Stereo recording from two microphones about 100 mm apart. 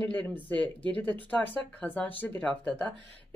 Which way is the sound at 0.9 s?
15° left (ahead or behind).